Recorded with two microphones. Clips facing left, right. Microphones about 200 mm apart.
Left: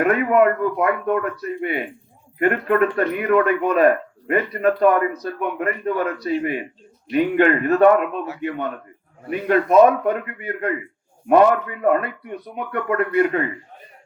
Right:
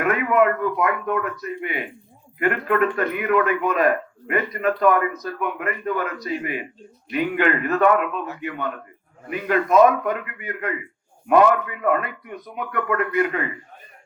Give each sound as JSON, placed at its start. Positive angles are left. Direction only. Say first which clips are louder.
{"t": 0.0, "sound": "a man's voice", "louder": "left 3 dB", "side_deg": 35}
{"t": 9.3, "sound": "a man's voice", "louder": "left 3 dB", "side_deg": 35}